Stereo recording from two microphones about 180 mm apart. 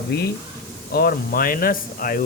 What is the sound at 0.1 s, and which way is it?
Speech, 60° left (ahead or behind).